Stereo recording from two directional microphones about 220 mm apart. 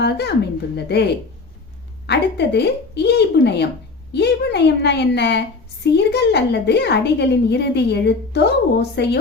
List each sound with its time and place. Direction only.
0.0 s a woman's voice: 50° left (ahead or behind)